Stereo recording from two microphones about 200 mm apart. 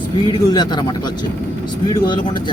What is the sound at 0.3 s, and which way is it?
Speech, 20° left (ahead or behind).